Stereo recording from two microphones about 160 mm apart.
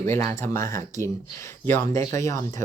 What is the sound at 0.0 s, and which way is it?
Speech, 15° left (ahead or behind).